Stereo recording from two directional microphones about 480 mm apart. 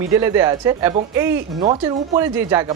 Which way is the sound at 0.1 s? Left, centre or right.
Centre.